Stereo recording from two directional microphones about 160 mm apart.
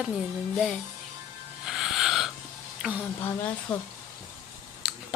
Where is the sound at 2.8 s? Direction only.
5° right (ahead or behind).